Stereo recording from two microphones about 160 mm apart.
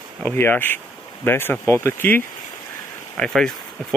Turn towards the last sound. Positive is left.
turn(degrees=5)  # may be behind; listen again after turning